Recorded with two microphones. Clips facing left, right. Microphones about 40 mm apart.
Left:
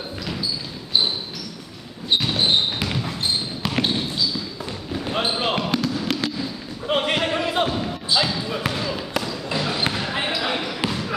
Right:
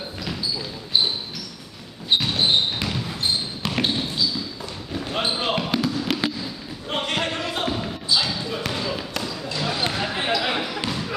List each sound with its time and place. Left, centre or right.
2.0 s basketball bounce: centre
6.9 s a sound: centre
7.6 s basketball bounce: centre
8.1 s basketball bounce: centre
8.5 s basketball bounce: centre
9.6 s basketball bounce: centre
9.9 s basketball bounce: centre